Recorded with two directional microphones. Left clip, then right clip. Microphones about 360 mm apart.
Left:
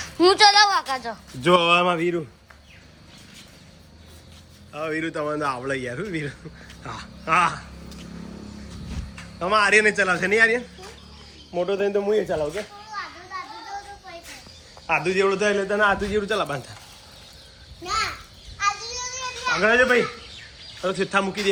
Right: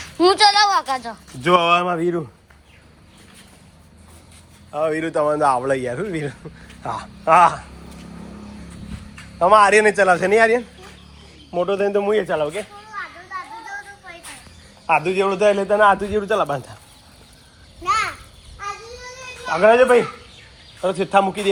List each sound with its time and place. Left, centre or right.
0.0 s speech: centre
4.7 s speech: centre
9.4 s speech: centre
11.5 s a man's voice: centre
12.0 s a man's voice: right
12.9 s children playing: centre
14.8 s a man's voice: centre
19.6 s a man's voice: centre